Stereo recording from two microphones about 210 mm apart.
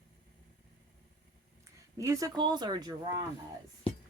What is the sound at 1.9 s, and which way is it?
Speech, 15° right (ahead or behind).